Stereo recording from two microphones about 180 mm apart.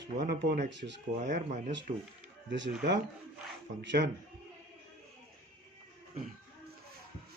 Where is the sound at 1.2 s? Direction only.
45° right (ahead or behind).